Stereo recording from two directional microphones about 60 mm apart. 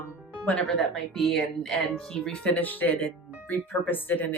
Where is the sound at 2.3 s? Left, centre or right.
Left.